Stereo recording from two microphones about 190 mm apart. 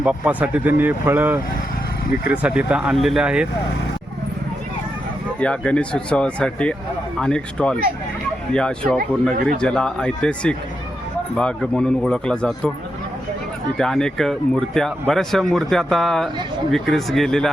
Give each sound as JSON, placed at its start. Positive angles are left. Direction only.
{"t": 0.0, "sound": "speech", "side_deg": -5}
{"t": 5.4, "sound": "speech", "side_deg": 5}
{"t": 9.3, "sound": "speech", "side_deg": -50}
{"t": 9.6, "sound": "speech", "side_deg": 5}
{"t": 13.7, "sound": "speech", "side_deg": 5}